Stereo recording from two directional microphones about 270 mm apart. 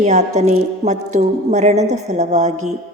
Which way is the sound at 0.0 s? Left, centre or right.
Right.